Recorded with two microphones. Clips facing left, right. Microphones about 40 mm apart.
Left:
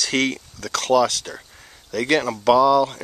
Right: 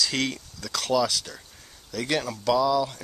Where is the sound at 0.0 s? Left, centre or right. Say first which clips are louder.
Left 5 dB; left.